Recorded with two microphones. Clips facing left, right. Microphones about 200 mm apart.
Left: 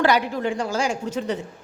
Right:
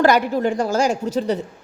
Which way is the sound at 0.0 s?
45° right (ahead or behind).